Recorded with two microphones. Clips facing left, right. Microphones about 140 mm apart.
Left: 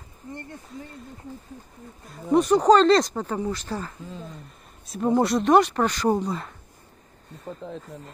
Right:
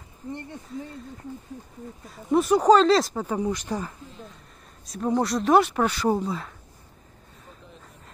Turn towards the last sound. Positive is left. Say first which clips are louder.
# left 13 dB
turn(degrees=90)